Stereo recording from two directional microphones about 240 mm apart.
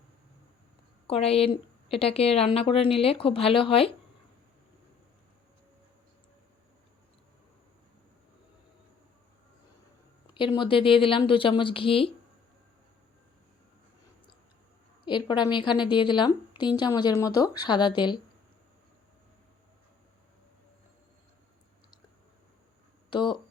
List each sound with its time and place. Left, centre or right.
1.0 s a woman's voice: left
10.3 s a woman's voice: left
15.0 s a woman's voice: centre
23.0 s speech: centre